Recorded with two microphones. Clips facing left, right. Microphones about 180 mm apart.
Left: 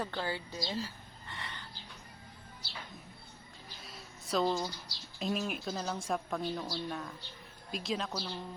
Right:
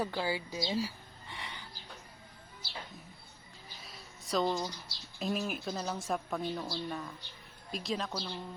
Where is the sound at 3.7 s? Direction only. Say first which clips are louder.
Left 1 dB; centre (ahead or behind).